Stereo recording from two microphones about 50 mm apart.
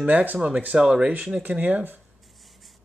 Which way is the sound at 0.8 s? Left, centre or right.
Centre.